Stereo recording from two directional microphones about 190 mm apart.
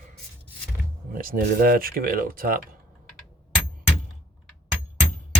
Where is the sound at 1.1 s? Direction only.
50° right (ahead or behind).